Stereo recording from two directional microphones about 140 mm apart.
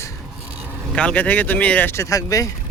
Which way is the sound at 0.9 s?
10° left (ahead or behind).